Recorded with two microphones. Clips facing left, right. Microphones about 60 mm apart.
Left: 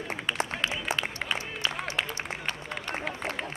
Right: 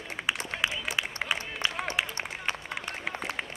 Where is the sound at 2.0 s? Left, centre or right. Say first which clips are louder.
Even; centre.